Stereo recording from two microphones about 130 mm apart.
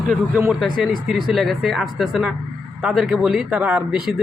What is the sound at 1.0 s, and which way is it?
Speech, centre (ahead or behind).